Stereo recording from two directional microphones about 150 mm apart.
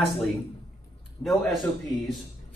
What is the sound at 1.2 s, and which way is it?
Speech, centre (ahead or behind).